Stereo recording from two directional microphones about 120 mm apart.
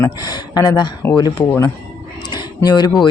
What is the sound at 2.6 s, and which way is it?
Speech, 35° left (ahead or behind).